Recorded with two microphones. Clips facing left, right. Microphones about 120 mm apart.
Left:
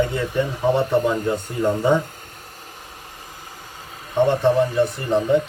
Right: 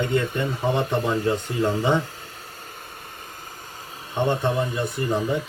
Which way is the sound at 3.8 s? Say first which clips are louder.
Left 5 dB; 30° right (ahead or behind).